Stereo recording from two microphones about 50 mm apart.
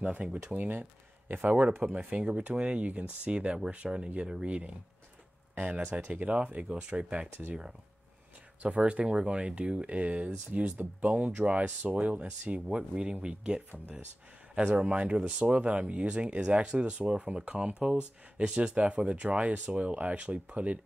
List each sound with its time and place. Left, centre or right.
0.0 s speech: right
0.6 s speech: right
8.6 s speech: right
16.3 s speech: centre
16.6 s speech: right